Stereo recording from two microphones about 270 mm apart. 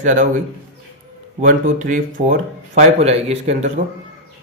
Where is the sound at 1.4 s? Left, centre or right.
Right.